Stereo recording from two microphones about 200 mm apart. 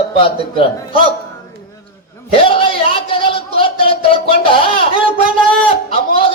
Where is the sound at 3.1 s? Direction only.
25° left (ahead or behind).